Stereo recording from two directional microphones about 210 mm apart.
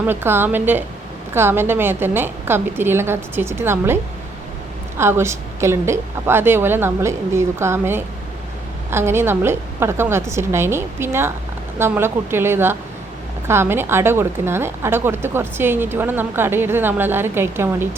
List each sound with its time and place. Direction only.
0.0 s a woman's voice: 10° right (ahead or behind)
4.9 s a woman's voice: 10° right (ahead or behind)